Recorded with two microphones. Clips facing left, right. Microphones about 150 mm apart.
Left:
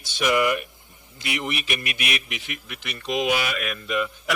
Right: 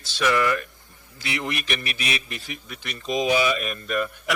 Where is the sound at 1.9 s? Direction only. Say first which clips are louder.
Even; 30° right (ahead or behind).